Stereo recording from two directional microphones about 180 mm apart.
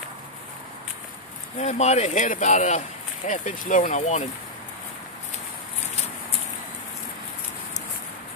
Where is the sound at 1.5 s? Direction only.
40° left (ahead or behind).